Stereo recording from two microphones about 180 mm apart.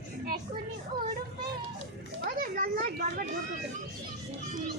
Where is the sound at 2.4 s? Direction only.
50° right (ahead or behind).